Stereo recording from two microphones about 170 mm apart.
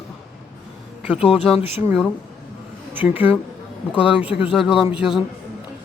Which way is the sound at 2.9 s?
10° right (ahead or behind).